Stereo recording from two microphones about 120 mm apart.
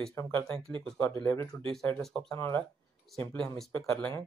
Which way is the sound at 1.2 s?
25° left (ahead or behind).